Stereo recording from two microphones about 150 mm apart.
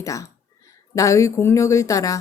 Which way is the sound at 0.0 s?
20° left (ahead or behind).